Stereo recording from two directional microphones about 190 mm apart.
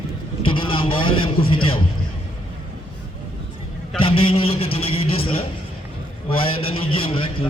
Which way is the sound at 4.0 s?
30° left (ahead or behind).